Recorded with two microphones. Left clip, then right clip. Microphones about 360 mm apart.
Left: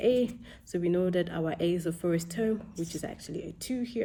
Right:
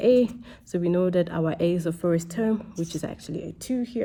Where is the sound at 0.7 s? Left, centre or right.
Right.